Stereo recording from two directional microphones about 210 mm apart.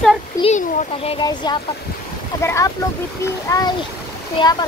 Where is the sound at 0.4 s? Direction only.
30° left (ahead or behind).